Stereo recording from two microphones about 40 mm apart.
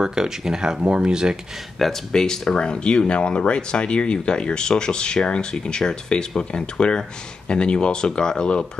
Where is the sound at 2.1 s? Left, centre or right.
Centre.